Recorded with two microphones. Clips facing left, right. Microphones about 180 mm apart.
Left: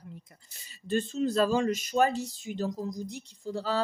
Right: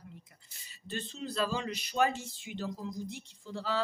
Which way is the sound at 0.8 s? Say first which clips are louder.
Left 11 dB; 45° left (ahead or behind).